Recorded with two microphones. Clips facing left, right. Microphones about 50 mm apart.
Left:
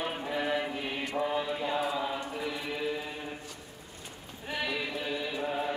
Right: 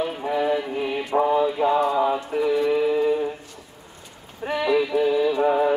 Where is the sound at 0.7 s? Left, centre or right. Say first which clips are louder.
Right 10 dB; right.